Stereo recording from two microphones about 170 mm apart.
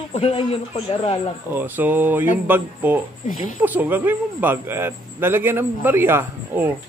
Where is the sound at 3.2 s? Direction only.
45° left (ahead or behind).